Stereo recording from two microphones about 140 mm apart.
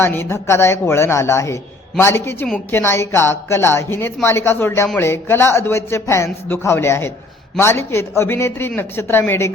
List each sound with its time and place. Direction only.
0.0 s a woman's voice: 15° left (ahead or behind)